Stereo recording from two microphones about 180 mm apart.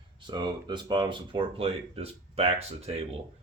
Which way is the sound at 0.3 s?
25° right (ahead or behind).